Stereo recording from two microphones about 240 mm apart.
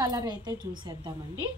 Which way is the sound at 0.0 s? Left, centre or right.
Centre.